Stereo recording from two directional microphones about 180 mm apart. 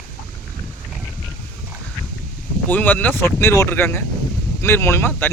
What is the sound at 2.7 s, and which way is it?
Speech, 10° left (ahead or behind).